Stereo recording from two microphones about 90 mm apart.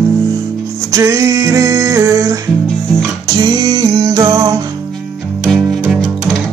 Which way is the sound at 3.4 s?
45° right (ahead or behind).